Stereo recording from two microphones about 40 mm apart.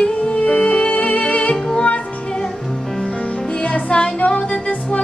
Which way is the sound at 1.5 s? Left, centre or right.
Centre.